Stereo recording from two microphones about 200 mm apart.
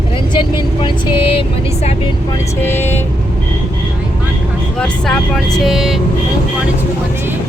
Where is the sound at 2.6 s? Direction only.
10° left (ahead or behind).